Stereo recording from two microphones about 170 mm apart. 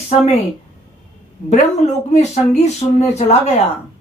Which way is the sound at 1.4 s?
40° left (ahead or behind).